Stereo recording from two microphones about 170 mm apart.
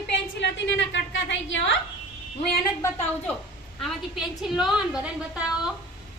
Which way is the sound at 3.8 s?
Centre (ahead or behind).